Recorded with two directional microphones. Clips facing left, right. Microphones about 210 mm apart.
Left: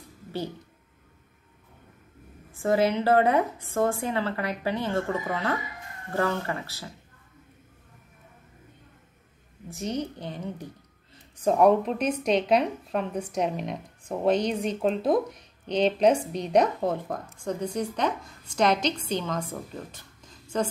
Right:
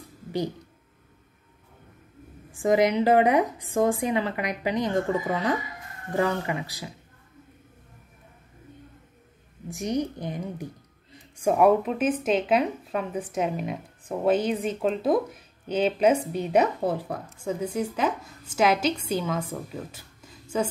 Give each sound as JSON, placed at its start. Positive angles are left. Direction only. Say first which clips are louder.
{"t": 2.5, "sound": "speech", "louder": "right 2 dB", "side_deg": -15}
{"t": 9.7, "sound": "a woman's voice", "louder": "right 3 dB", "side_deg": -15}